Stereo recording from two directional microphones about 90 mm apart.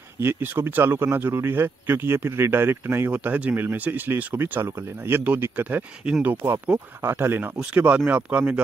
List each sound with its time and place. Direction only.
0.2 s speech: 25° right (ahead or behind)